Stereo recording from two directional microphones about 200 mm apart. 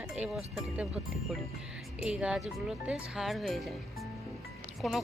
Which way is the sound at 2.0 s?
5° right (ahead or behind).